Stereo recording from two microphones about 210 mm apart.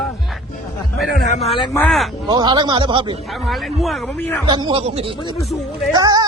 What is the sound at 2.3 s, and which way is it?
Speech, 20° right (ahead or behind).